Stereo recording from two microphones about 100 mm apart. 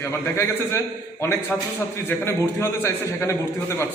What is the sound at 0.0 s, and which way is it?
Speech, 25° left (ahead or behind).